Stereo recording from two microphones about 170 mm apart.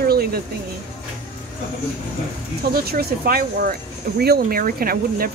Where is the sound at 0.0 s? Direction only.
65° right (ahead or behind).